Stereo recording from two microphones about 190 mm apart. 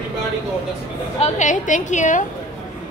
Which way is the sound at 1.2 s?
40° left (ahead or behind).